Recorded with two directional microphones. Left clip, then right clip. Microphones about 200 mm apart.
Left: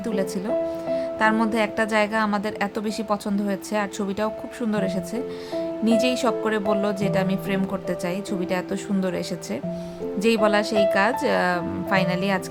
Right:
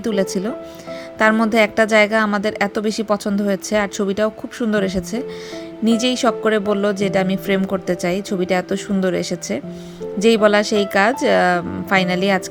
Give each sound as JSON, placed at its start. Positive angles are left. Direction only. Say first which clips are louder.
{"t": 0.0, "sound": "a woman's voice", "louder": "right 6 dB", "side_deg": -20}